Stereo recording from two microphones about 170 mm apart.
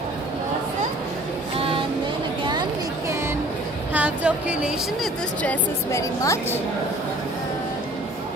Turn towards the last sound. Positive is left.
turn(degrees=15)  # may be behind; listen again after turning